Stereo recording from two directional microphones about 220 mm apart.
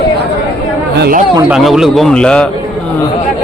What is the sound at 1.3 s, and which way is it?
Speech, 5° right (ahead or behind).